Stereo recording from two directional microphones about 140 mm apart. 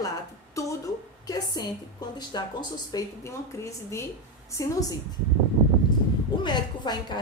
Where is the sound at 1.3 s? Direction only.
30° left (ahead or behind).